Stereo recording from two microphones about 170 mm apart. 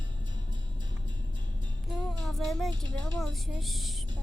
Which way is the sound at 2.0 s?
Centre (ahead or behind).